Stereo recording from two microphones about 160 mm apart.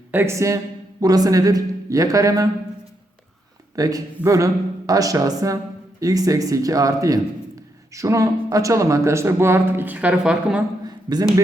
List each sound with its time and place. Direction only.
0.1 s a woman's voice: 15° right (ahead or behind)
3.8 s speech: 20° right (ahead or behind)
10.8 s a sound: 25° right (ahead or behind)